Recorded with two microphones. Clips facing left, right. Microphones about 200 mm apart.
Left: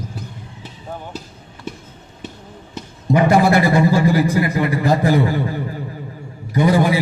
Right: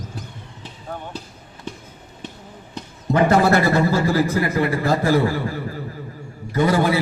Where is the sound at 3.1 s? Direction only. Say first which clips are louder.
Left 2 dB; 10° left (ahead or behind).